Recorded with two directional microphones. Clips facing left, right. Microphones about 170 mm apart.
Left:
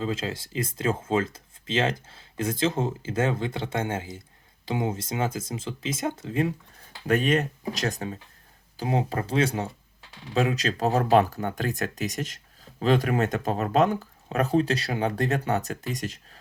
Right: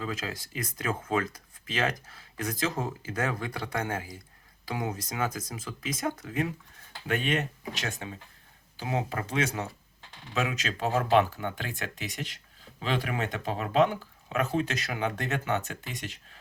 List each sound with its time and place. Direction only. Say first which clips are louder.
0.0 s speech: left 5 dB; 25° left (ahead or behind)
7.1 s speech: left 6 dB; 40° left (ahead or behind)